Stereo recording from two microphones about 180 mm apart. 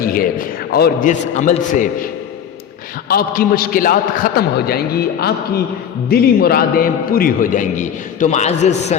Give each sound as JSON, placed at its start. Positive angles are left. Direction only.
{"t": 0.0, "sound": "a man's voice", "side_deg": 55}
{"t": 1.1, "sound": "a man's voice", "side_deg": 45}
{"t": 3.1, "sound": "a man's voice", "side_deg": 55}
{"t": 6.1, "sound": "a man's voice", "side_deg": 60}